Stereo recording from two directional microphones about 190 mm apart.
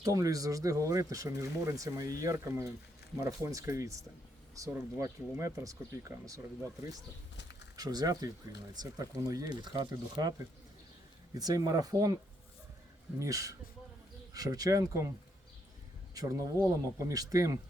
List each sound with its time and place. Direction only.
0.0 s speech: 20° right (ahead or behind)
7.3 s a sound: 65° left (ahead or behind)
7.8 s speech: 20° right (ahead or behind)
13.1 s speech: 15° right (ahead or behind)
16.1 s speech: 15° right (ahead or behind)